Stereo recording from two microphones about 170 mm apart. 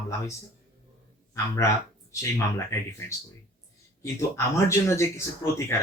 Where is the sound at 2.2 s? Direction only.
15° left (ahead or behind).